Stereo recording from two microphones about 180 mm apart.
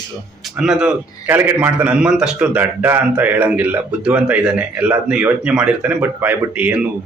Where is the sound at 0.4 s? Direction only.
Centre (ahead or behind).